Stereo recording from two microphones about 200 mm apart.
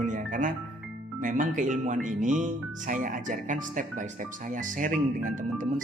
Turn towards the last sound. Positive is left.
turn(degrees=-40)  # may be behind; listen again after turning